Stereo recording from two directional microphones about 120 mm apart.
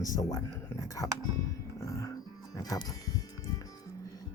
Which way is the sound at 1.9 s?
25° left (ahead or behind).